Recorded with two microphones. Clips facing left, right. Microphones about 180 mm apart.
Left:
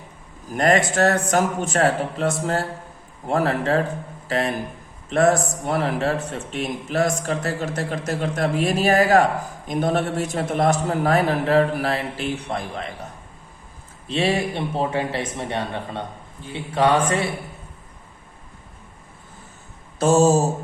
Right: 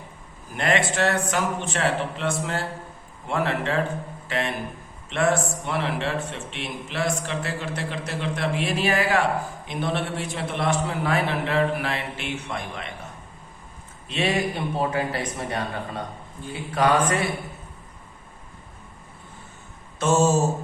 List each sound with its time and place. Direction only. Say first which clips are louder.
0.5 s a man's voice: left 5 dB; 40° left (ahead or behind)
14.1 s a man's voice: left 3 dB; 30° left (ahead or behind)
20.0 s a man's voice: left 4 dB; 35° left (ahead or behind)